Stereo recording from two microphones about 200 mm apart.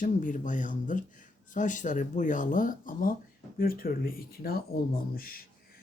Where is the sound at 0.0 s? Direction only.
40° left (ahead or behind).